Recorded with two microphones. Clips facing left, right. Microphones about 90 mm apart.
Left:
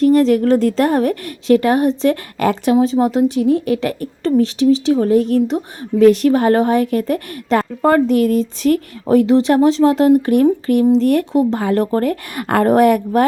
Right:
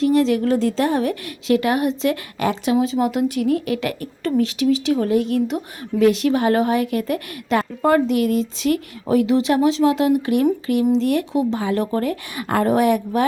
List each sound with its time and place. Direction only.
0.0 s a woman's voice: 45° left (ahead or behind)